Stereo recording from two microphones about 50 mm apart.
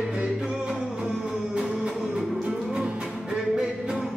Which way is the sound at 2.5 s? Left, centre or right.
Centre.